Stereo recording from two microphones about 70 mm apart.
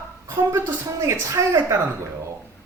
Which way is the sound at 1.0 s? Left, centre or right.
Right.